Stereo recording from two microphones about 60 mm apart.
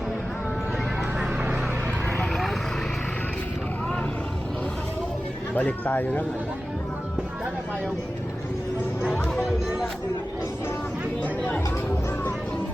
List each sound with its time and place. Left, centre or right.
2.3 s vehicle: centre
5.5 s speech: left
9.0 s a sound: centre
11.2 s speech: left